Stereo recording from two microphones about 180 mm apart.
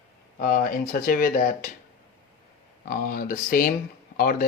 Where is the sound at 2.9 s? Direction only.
50° left (ahead or behind).